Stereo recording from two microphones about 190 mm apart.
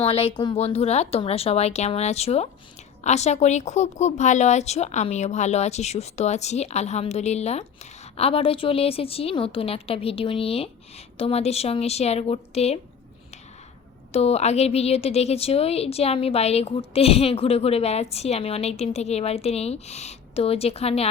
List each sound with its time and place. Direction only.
0.0 s a woman's voice: 30° left (ahead or behind)
14.1 s a woman's voice: 35° left (ahead or behind)